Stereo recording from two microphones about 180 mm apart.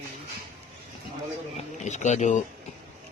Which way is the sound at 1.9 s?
40° left (ahead or behind).